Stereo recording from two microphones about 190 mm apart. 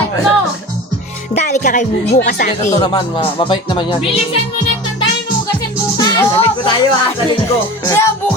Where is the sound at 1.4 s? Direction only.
40° left (ahead or behind).